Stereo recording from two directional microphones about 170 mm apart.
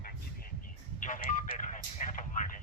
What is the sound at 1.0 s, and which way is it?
Speech, 55° left (ahead or behind).